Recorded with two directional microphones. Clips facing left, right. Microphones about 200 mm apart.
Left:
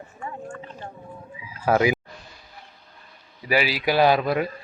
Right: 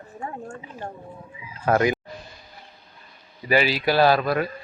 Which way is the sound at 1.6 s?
5° left (ahead or behind).